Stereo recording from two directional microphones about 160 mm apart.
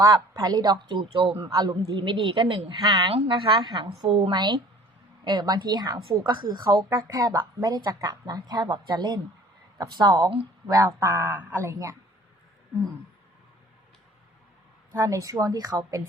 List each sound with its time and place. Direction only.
0.0 s a woman's voice: 20° right (ahead or behind)
1.4 s a woman's voice: 25° right (ahead or behind)
14.9 s a woman's voice: 20° right (ahead or behind)